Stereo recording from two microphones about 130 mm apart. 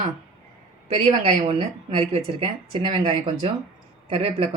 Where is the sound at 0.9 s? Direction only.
55° right (ahead or behind).